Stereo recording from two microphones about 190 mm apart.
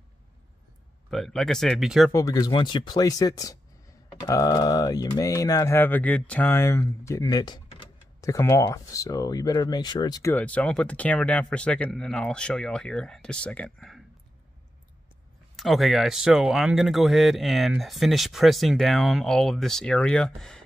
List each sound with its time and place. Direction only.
1.1 s speech: centre (ahead or behind)
2.1 s speech: 15° left (ahead or behind)
10.3 s speech: 5° left (ahead or behind)
15.5 s speech: centre (ahead or behind)